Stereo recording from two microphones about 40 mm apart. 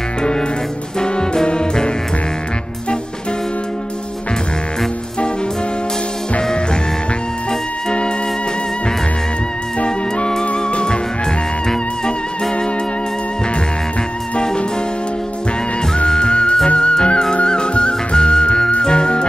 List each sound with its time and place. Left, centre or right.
0.2 s music: centre
6.4 s music: left
9.8 s music: left
14.4 s music: centre
16.1 s music: left